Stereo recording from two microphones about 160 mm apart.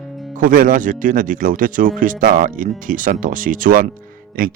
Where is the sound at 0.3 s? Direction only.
60° right (ahead or behind).